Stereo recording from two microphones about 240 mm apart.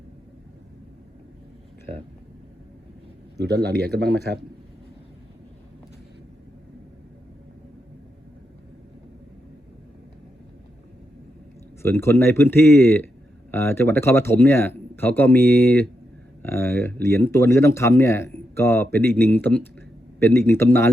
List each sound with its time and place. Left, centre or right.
3.5 s speech: right
11.8 s speech: centre